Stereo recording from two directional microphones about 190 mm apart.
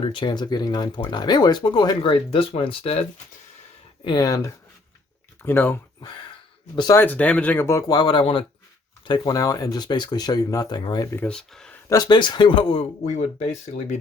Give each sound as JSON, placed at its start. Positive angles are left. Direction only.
{"t": 0.0, "sound": "speech", "side_deg": 25}
{"t": 4.0, "sound": "speech", "side_deg": 20}
{"t": 6.7, "sound": "speech", "side_deg": 20}
{"t": 7.0, "sound": "speech", "side_deg": 10}
{"t": 11.9, "sound": "speech", "side_deg": 20}